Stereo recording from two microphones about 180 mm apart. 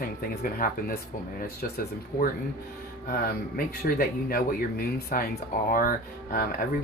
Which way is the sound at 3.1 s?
55° left (ahead or behind).